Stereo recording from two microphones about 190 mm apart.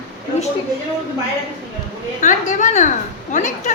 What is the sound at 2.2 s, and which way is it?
A woman's voice, 40° left (ahead or behind).